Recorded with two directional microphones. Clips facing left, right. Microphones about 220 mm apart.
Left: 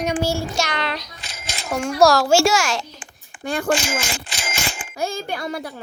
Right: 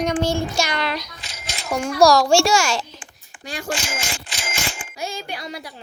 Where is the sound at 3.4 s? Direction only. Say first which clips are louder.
Left 7 dB; 55° left (ahead or behind).